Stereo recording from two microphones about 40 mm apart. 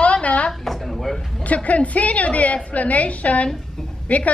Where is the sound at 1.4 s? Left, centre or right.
Left.